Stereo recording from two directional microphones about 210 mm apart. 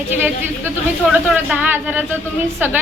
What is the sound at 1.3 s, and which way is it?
Speech, 5° right (ahead or behind).